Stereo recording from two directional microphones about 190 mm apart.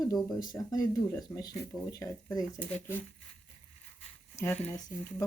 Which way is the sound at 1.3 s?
20° left (ahead or behind).